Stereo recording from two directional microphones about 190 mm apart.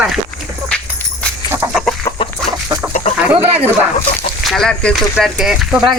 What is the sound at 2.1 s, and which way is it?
Chicken, 15° left (ahead or behind).